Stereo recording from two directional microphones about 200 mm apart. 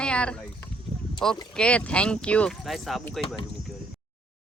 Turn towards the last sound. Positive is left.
turn(degrees=0)  # may be behind; listen again after turning